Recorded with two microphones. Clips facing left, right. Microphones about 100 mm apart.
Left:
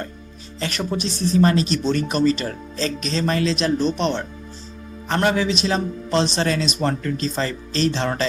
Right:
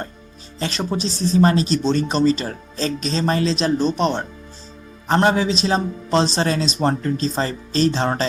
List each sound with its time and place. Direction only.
0.6 s speech: 30° right (ahead or behind)